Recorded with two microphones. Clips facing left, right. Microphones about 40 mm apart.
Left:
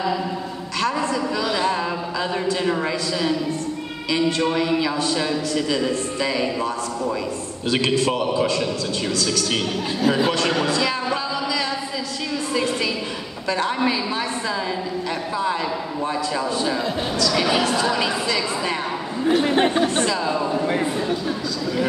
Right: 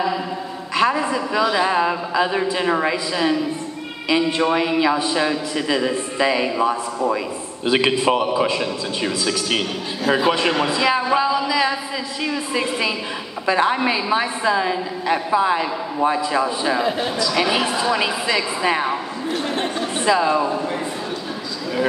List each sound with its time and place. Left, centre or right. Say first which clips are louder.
0.7 s a woman's voice: right 4 dB; centre
13.5 s a woman's voice: right 4 dB; right
19.2 s speech: left 7 dB; left
20.1 s a woman's voice: right 6 dB; centre